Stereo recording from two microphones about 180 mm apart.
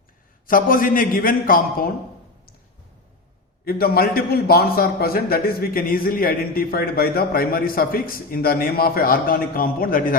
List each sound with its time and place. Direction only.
0.4 s a man's voice: 50° left (ahead or behind)
3.6 s a man's voice: 55° left (ahead or behind)